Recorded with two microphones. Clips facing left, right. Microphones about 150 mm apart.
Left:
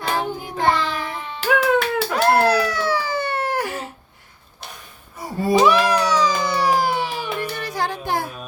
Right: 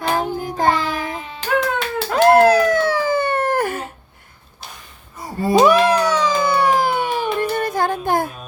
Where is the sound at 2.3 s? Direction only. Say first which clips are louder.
Right 6 dB; 50° right (ahead or behind).